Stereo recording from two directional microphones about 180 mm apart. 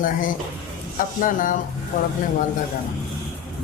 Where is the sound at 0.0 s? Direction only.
50° left (ahead or behind).